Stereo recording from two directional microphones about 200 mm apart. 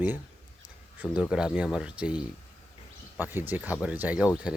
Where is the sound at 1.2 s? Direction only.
5° right (ahead or behind).